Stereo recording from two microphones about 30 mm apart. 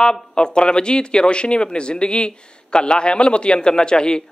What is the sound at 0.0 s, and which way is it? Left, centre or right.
Speech, left.